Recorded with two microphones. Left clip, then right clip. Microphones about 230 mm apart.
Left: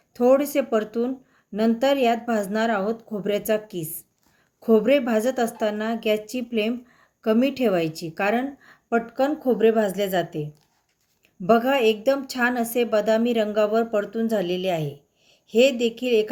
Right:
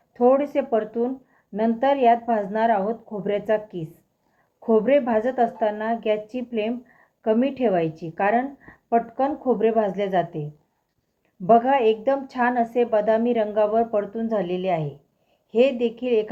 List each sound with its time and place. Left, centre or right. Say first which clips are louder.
0.1 s a woman's voice: even; left
11.4 s a woman's voice: right 2 dB; left